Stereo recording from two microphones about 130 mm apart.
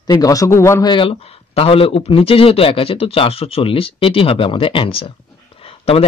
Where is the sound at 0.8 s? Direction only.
40° left (ahead or behind).